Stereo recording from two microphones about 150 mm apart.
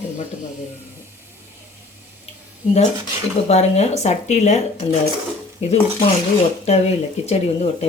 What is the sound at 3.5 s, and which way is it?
Speech, 45° left (ahead or behind).